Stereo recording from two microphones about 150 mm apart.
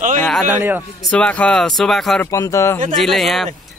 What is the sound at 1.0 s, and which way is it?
Speech, 5° left (ahead or behind).